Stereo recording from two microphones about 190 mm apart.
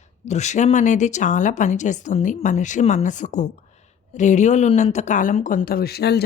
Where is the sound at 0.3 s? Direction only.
35° left (ahead or behind).